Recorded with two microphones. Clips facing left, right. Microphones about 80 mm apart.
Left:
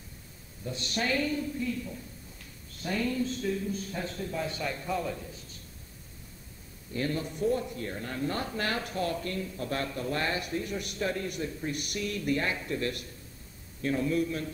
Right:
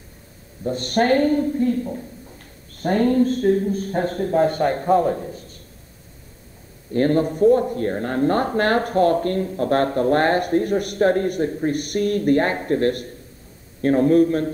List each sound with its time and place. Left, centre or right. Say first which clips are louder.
0.7 s speech: right 13 dB; right
6.9 s speech: right 14 dB; right